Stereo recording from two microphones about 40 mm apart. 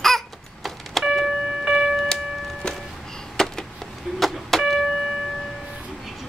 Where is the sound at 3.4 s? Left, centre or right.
Centre.